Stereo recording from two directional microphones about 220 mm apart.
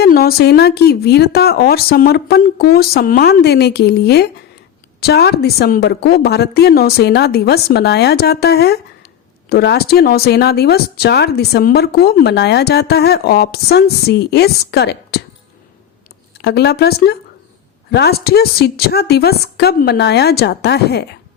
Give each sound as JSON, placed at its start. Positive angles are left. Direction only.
{"t": 0.0, "sound": "speech", "side_deg": 45}
{"t": 16.4, "sound": "speech", "side_deg": 50}